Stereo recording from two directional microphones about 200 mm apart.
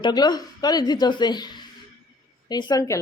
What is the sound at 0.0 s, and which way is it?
A woman's voice, 20° left (ahead or behind).